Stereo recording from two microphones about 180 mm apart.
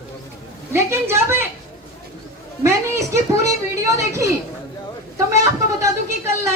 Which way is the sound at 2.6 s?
15° right (ahead or behind).